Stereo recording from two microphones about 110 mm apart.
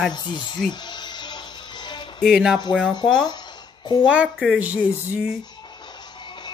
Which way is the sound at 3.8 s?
45° left (ahead or behind).